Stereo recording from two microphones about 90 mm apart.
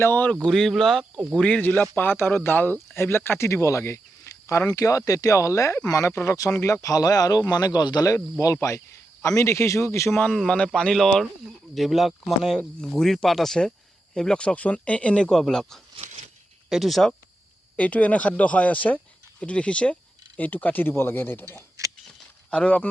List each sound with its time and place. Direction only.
0.0 s speech: 20° left (ahead or behind)
0.4 s speech: 5° left (ahead or behind)
1.4 s speech: 10° left (ahead or behind); by 10.1 s 35° left (ahead or behind)
10.3 s speech: 5° left (ahead or behind)
12.5 s speech: 10° left (ahead or behind)
17.7 s speech: 15° left (ahead or behind)
21.8 s a sound: 35° right (ahead or behind)
22.4 s speech: 15° left (ahead or behind)